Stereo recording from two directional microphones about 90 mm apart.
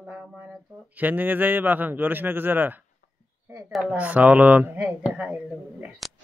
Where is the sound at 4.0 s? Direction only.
15° right (ahead or behind).